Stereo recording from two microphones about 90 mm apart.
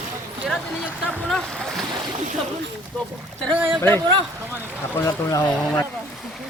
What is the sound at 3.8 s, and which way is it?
Speech, 30° left (ahead or behind).